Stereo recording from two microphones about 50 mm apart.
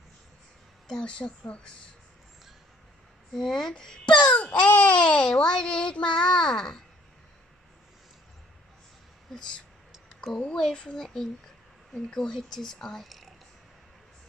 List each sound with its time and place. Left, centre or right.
0.8 s a woman's voice: centre
3.3 s speech: centre
10.2 s speech: centre
13.0 s a sound: centre